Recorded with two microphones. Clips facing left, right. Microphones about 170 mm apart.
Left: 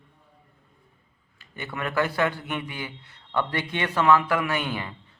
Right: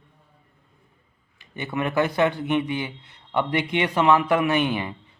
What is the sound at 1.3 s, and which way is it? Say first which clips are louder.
A man's voice: right 7 dB; 20° right (ahead or behind).